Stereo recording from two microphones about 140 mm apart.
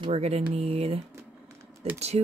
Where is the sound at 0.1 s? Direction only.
45° right (ahead or behind).